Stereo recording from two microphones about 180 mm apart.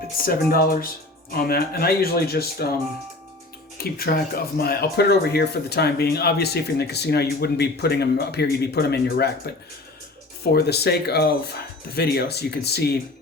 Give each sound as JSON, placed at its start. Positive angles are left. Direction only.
{"t": 0.2, "sound": "speech", "side_deg": 55}
{"t": 3.8, "sound": "speech", "side_deg": 55}
{"t": 10.4, "sound": "speech", "side_deg": 65}